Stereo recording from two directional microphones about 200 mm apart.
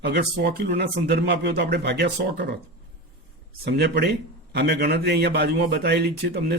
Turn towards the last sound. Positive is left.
turn(degrees=-55)  # may be behind; listen again after turning